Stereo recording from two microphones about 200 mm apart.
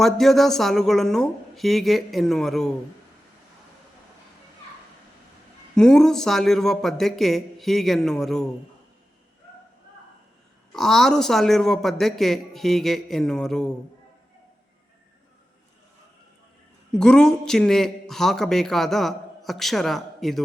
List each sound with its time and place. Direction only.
0.0 s a man's voice: centre (ahead or behind)
5.7 s a man's voice: 5° left (ahead or behind)
10.7 s a man's voice: centre (ahead or behind)
16.9 s a man's voice: 5° left (ahead or behind)